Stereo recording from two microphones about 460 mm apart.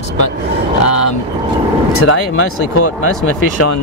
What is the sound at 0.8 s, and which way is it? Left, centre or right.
Speech, left.